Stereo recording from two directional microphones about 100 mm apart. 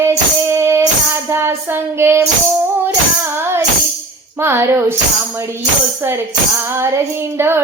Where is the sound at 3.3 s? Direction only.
25° right (ahead or behind).